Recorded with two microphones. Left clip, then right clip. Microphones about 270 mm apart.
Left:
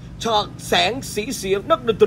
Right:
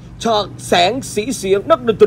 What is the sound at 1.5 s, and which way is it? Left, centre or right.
Speech, right.